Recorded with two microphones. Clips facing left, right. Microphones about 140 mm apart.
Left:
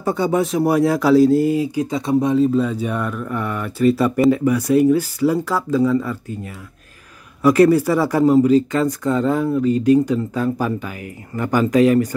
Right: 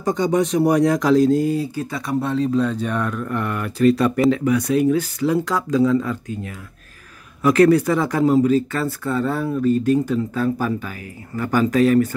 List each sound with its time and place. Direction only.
0.0 s speech: 10° left (ahead or behind)